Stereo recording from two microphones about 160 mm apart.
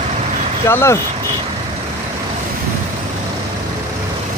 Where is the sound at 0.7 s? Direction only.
15° left (ahead or behind).